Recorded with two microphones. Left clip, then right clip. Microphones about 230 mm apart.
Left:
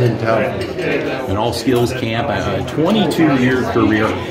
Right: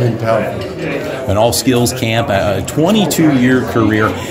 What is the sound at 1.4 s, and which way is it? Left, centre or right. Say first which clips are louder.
Speech: right 4 dB; right.